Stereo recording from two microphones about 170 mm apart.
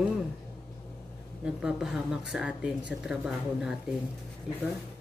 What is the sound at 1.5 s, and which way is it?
Speech, centre (ahead or behind).